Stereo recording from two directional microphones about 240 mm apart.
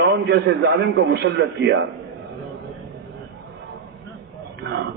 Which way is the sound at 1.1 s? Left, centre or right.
Right.